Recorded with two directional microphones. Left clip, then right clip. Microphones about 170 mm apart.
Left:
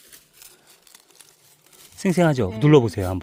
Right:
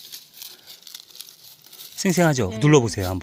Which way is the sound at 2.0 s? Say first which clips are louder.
Even; 10° left (ahead or behind).